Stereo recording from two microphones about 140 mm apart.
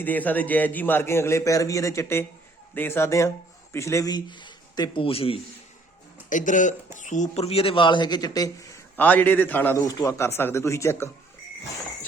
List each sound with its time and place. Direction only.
0.0 s a man's voice: 10° left (ahead or behind); by 5.4 s 40° left (ahead or behind)
6.3 s speech: 65° left (ahead or behind); by 9.8 s 15° left (ahead or behind)
9.8 s speech: 25° left (ahead or behind)